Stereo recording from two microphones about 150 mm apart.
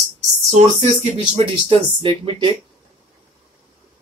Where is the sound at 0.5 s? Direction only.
45° right (ahead or behind).